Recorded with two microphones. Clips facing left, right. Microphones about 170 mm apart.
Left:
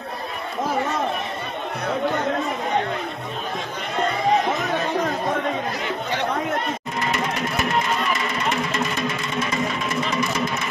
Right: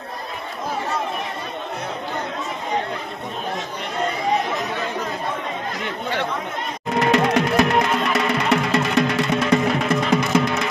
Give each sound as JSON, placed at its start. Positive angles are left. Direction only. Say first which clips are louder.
{"t": 7.0, "sound": "music", "louder": "right 9 dB", "side_deg": -70}